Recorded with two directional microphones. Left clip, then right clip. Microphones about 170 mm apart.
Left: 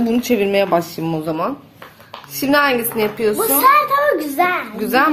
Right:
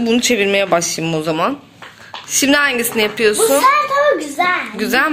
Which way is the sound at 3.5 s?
25° right (ahead or behind).